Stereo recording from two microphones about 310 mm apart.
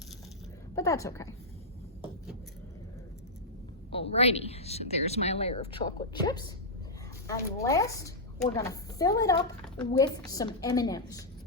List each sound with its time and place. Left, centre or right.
0.8 s a woman's voice: centre
4.1 s a woman's voice: centre